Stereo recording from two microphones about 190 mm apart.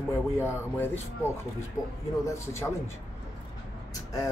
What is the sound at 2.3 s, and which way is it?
Speech, 15° left (ahead or behind).